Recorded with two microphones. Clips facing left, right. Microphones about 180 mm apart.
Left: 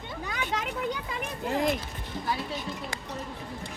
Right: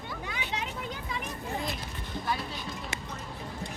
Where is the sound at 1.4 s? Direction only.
90° left.